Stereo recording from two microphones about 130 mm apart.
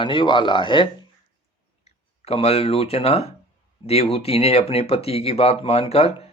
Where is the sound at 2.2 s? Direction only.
50° left (ahead or behind).